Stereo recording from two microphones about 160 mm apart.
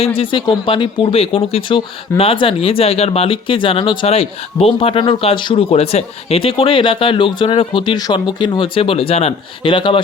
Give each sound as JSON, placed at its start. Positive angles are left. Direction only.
{"t": 0.0, "sound": "speech", "side_deg": 35}